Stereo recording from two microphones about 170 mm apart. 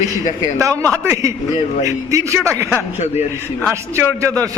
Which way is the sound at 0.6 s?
20° right (ahead or behind).